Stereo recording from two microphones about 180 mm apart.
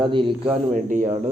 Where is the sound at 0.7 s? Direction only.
45° right (ahead or behind).